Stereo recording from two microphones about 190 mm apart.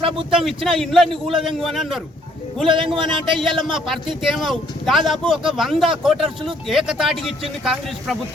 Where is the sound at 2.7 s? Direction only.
25° right (ahead or behind).